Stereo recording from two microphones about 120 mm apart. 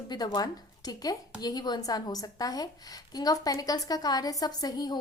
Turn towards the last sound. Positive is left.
turn(degrees=35)  # may be behind; listen again after turning